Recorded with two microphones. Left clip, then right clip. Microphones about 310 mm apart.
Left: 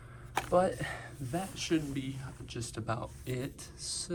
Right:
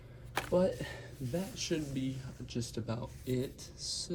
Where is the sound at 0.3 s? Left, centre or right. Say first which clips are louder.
Left 3 dB; centre.